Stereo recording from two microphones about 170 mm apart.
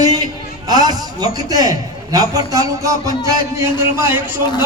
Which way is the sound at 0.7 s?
25° right (ahead or behind).